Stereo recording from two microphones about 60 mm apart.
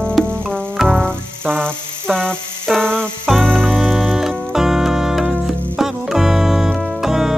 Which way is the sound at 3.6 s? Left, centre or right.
Centre.